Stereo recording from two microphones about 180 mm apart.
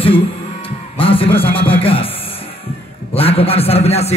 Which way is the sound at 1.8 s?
30° left (ahead or behind).